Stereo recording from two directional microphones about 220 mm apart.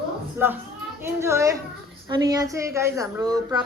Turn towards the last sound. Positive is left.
turn(degrees=-15)  # may be behind; listen again after turning